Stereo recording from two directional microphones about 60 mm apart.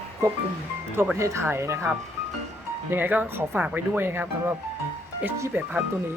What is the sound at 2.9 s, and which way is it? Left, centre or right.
Speech, right.